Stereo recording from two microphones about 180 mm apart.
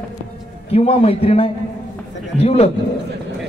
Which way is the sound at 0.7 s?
35° left (ahead or behind).